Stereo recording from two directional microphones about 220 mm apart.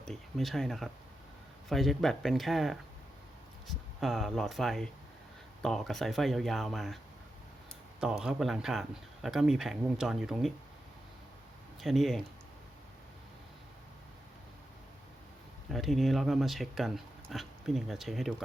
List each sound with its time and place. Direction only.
0.0 s speech: centre (ahead or behind)
8.0 s speech: 5° right (ahead or behind)
11.8 s speech: centre (ahead or behind)
15.7 s speech: centre (ahead or behind)